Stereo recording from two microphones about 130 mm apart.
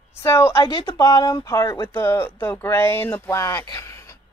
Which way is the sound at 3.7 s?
20° left (ahead or behind).